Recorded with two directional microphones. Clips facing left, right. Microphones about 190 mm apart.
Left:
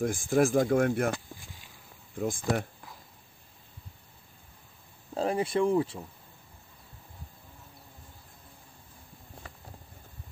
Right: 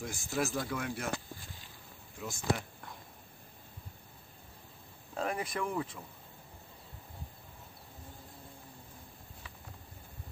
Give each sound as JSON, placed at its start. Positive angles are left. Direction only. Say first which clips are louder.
{"t": 0.0, "sound": "speech", "louder": "left 10 dB", "side_deg": 50}
{"t": 2.1, "sound": "speech", "louder": "left 6 dB", "side_deg": 55}
{"t": 5.1, "sound": "speech", "louder": "left 8 dB", "side_deg": 30}